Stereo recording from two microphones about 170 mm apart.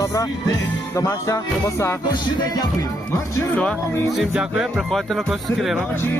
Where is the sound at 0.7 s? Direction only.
20° left (ahead or behind).